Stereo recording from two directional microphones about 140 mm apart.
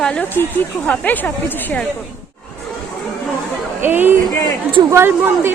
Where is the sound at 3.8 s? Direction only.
15° right (ahead or behind).